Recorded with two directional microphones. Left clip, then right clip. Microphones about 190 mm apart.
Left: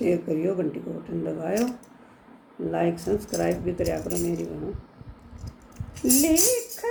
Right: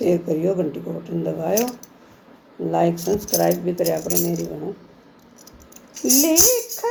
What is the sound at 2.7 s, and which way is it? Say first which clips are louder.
Speech: right 6 dB; 15° left (ahead or behind).